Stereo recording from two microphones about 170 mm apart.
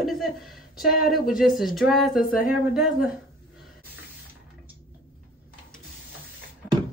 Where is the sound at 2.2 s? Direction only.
55° left (ahead or behind).